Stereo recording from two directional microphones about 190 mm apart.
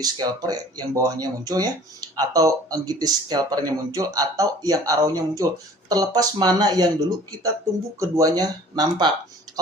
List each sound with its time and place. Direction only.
0.0 s speech: 20° right (ahead or behind)